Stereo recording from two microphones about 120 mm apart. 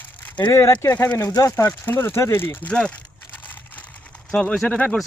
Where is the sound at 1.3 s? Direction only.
25° left (ahead or behind).